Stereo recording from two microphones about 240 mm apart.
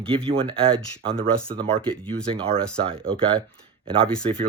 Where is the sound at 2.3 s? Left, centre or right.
Right.